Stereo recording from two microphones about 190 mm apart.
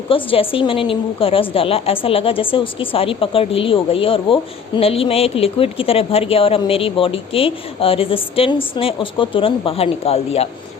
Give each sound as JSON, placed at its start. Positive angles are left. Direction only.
{"t": 0.1, "sound": "a woman's voice", "side_deg": 30}